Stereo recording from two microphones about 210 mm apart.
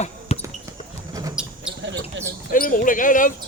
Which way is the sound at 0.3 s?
30° left (ahead or behind).